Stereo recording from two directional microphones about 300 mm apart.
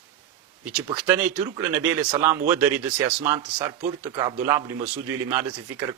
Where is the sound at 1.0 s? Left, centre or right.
Centre.